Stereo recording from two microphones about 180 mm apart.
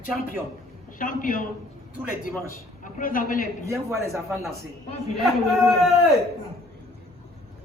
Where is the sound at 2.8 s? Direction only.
50° left (ahead or behind).